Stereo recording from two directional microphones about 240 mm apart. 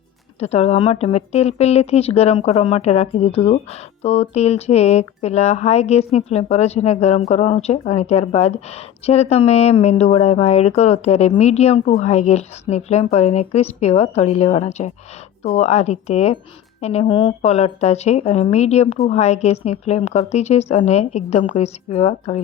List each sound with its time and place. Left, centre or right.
0.3 s speech: left